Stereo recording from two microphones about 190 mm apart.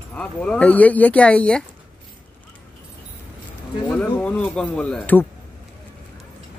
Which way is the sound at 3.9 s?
5° left (ahead or behind).